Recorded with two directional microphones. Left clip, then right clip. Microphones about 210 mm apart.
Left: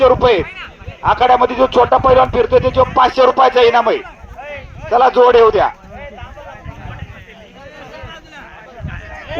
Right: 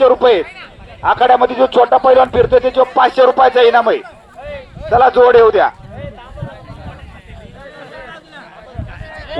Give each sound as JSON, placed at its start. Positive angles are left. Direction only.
{"t": 0.0, "sound": "a man's voice", "side_deg": 50}
{"t": 0.4, "sound": "speech", "side_deg": -60}
{"t": 1.0, "sound": "a man's voice", "side_deg": 50}